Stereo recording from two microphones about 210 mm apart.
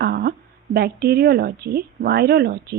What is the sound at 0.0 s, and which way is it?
A woman's voice, 50° right (ahead or behind).